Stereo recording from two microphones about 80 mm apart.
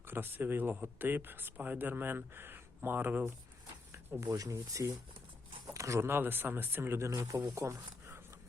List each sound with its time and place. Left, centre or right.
0.0 s speech: right
4.2 s speech: right
5.7 s a sound: right
6.0 s speech: right
7.1 s speech: right